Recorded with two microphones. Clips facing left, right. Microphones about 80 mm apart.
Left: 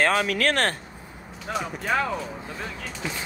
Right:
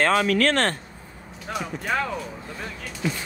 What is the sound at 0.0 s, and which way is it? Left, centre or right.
Speech, centre.